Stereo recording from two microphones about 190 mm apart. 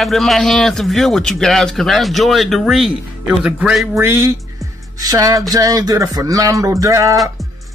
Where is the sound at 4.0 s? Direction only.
15° right (ahead or behind).